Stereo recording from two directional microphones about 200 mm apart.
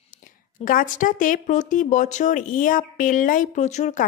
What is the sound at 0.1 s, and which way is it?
Speech, 40° left (ahead or behind).